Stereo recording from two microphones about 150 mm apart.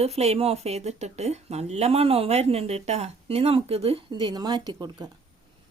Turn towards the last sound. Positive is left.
turn(degrees=-30)  # may be behind; listen again after turning